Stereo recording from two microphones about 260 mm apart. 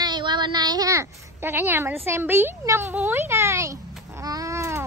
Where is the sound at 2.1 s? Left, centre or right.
Centre.